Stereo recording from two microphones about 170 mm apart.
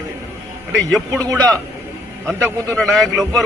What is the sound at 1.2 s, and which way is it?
Speech, 20° right (ahead or behind).